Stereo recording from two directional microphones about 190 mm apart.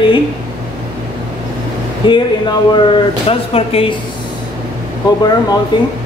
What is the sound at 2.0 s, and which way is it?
Speech, 25° left (ahead or behind).